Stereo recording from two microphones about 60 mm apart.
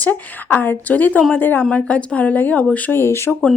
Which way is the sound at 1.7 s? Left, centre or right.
Left.